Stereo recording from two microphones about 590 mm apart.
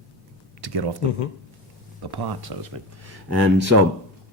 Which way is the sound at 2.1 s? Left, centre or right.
Right.